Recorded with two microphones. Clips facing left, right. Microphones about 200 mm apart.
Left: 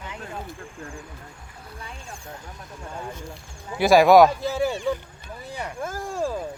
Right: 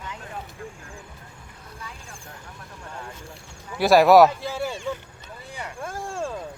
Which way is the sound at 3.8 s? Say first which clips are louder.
Even; centre (ahead or behind).